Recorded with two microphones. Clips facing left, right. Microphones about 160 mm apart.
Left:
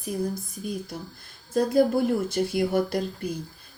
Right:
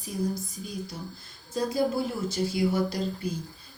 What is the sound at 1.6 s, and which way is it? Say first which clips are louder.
Speech: left 6 dB; 55° left (ahead or behind).